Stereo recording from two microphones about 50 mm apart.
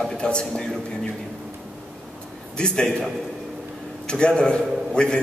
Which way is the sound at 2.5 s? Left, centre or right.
Centre.